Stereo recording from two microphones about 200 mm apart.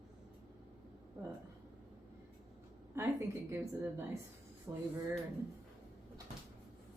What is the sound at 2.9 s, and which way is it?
Speech, 15° right (ahead or behind).